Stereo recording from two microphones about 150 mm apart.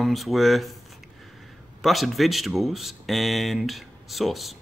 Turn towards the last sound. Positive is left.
turn(degrees=0)  # may be behind; listen again after turning